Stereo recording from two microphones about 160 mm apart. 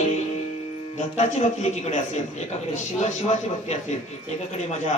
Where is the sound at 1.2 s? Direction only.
45° left (ahead or behind).